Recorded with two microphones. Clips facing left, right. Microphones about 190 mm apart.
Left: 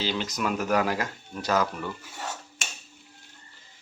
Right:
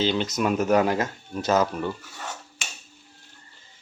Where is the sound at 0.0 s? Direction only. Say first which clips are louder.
Right 5 dB; 20° right (ahead or behind).